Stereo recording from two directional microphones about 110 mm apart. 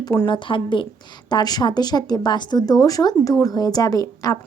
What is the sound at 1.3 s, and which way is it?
Speech, 40° left (ahead or behind).